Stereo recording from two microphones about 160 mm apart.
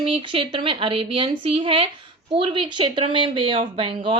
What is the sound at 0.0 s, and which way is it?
Speech, 35° right (ahead or behind).